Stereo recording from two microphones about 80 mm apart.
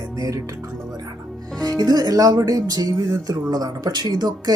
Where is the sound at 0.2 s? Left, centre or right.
Right.